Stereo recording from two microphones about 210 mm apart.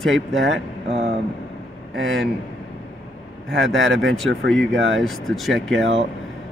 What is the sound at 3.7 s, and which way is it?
Speech, 65° right (ahead or behind).